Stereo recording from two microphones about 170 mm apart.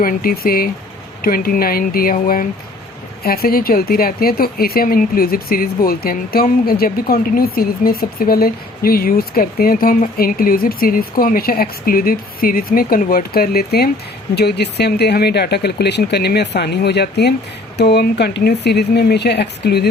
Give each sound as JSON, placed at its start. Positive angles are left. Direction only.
{"t": 0.0, "sound": "speech", "side_deg": 55}